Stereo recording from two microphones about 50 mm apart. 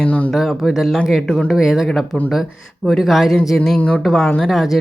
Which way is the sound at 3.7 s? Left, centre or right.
Left.